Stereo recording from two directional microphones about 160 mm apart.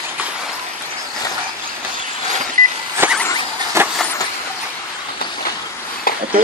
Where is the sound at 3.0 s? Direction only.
10° right (ahead or behind).